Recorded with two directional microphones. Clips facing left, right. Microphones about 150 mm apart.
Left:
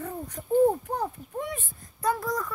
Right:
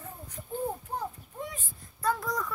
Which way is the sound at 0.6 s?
65° left (ahead or behind).